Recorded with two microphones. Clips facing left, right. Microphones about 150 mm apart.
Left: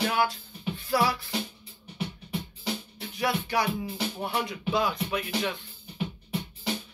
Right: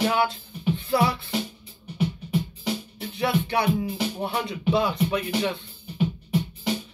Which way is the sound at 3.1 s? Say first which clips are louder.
Right 3 dB; 25° right (ahead or behind).